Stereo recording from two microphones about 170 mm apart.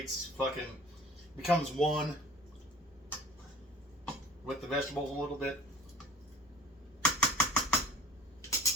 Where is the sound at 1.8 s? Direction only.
Centre (ahead or behind).